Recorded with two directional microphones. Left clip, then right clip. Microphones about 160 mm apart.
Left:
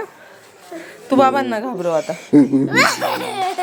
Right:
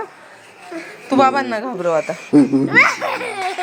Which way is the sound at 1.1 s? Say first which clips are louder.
Even; 20° left (ahead or behind).